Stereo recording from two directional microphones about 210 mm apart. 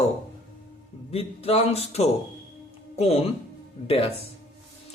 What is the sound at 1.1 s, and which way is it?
Speech, 30° left (ahead or behind).